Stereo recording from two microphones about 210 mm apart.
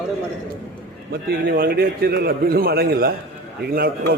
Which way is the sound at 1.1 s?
45° right (ahead or behind).